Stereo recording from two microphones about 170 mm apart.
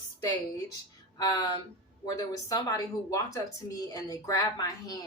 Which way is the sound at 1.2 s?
20° left (ahead or behind).